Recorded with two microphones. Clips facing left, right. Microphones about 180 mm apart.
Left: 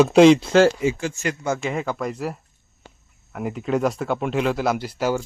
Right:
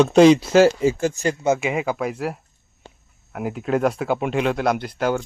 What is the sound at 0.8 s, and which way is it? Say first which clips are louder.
Speech: right 3 dB; 40° right (ahead or behind).